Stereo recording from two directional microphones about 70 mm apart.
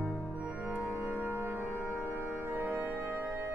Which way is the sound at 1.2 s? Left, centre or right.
Right.